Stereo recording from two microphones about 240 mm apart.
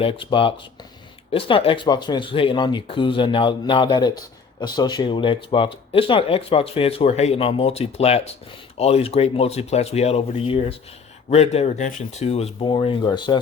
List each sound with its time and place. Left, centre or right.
0.0 s speech: left